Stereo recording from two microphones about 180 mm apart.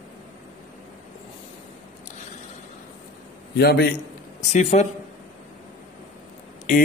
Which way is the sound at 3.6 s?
60° left (ahead or behind).